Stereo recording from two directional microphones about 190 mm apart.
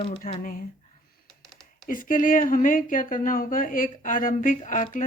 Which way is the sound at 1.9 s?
45° left (ahead or behind).